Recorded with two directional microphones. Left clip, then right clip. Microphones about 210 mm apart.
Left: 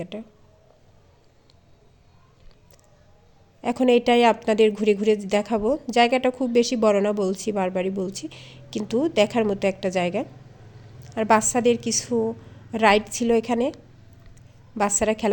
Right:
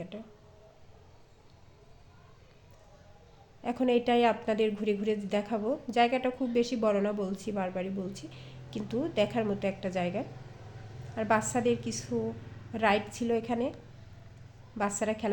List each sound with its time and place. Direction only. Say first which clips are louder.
3.6 s a woman's voice: left 9 dB; 45° left (ahead or behind)
14.8 s a woman's voice: left 9 dB; 45° left (ahead or behind)